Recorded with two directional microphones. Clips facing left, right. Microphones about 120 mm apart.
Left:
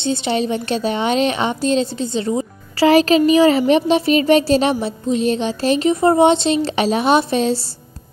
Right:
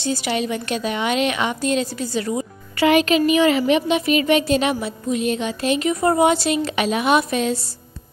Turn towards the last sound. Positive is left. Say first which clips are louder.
# left 3 dB
turn(degrees=30)  # may be behind; listen again after turning